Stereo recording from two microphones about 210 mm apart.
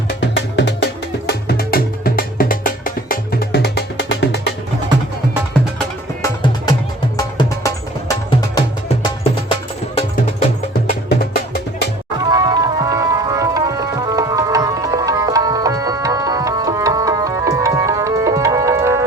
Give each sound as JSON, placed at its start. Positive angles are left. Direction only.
{"t": 0.2, "sound": "music", "side_deg": 55}
{"t": 6.2, "sound": "music", "side_deg": 20}
{"t": 10.8, "sound": "music", "side_deg": 45}
{"t": 12.2, "sound": "tabla", "side_deg": -20}